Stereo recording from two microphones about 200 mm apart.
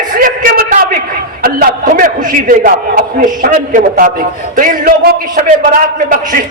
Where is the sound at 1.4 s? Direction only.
45° right (ahead or behind).